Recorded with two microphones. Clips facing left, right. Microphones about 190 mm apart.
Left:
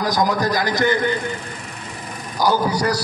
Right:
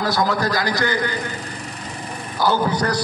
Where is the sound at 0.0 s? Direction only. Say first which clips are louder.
Left 1 dB; 15° left (ahead or behind).